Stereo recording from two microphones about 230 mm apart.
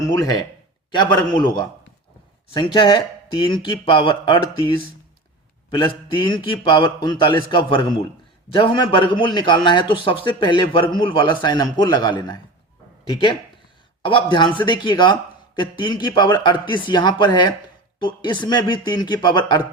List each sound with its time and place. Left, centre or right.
0.0 s a man's voice: centre